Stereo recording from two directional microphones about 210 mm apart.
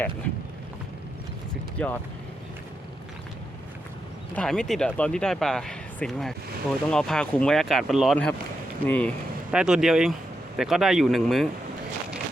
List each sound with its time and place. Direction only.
1.8 s speech: 5° left (ahead or behind)
4.4 s speech: centre (ahead or behind)
9.5 s speech: 5° right (ahead or behind)